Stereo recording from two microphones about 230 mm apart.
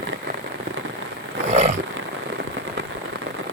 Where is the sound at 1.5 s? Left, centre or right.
Right.